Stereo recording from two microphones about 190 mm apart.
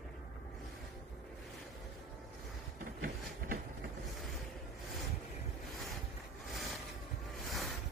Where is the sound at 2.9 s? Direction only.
50° right (ahead or behind).